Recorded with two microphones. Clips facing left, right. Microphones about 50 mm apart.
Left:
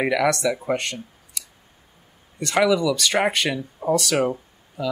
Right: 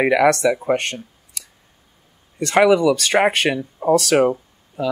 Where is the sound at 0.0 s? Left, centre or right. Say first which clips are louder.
Right 5 dB; right.